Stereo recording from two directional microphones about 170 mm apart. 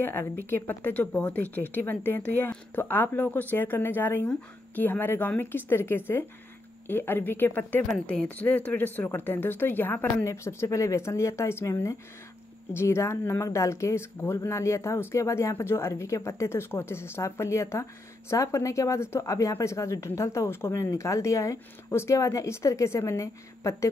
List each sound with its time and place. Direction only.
0.0 s speech: 15° left (ahead or behind)